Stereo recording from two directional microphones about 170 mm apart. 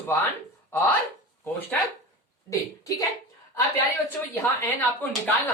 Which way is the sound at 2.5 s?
20° left (ahead or behind).